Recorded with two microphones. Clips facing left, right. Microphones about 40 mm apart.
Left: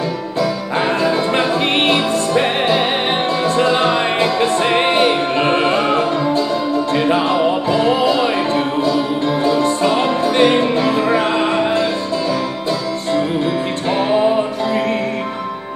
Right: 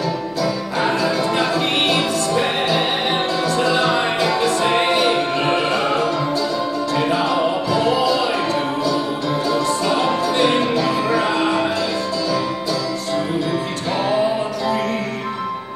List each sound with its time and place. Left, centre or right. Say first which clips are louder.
0.4 s music: left 4 dB; left
14.1 s music: left 5 dB; left